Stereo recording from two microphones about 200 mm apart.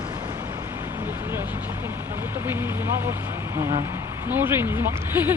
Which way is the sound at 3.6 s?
15° right (ahead or behind).